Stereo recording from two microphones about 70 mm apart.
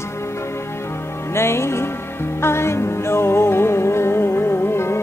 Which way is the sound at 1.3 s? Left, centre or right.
Left.